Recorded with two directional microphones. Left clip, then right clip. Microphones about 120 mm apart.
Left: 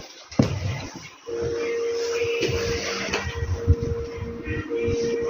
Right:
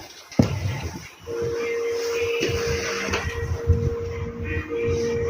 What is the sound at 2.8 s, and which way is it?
Printer, 50° right (ahead or behind).